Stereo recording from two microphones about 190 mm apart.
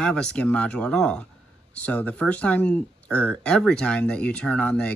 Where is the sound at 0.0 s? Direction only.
5° left (ahead or behind).